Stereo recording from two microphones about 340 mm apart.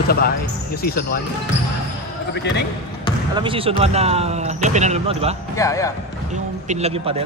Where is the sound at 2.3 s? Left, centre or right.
Left.